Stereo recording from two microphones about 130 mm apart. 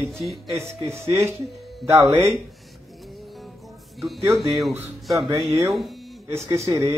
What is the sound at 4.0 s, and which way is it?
Speech, centre (ahead or behind).